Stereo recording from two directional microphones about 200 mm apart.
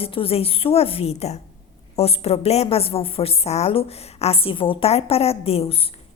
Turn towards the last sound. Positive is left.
turn(degrees=30)  # may be behind; listen again after turning